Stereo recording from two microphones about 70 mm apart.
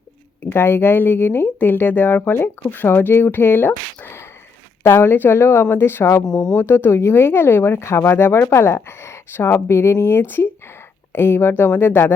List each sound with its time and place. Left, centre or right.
0.5 s speech: left
6.2 s speech: centre
6.6 s speech: left